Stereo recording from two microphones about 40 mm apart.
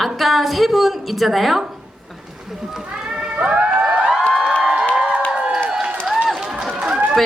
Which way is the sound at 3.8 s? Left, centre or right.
Right.